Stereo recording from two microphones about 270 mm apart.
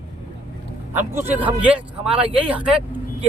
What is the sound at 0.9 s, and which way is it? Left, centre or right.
Speech, centre.